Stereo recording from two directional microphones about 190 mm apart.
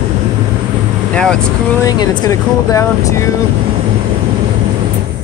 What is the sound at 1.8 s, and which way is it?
Speech, 20° left (ahead or behind).